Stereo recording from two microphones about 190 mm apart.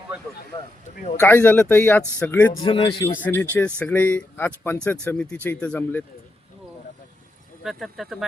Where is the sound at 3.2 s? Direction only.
10° left (ahead or behind).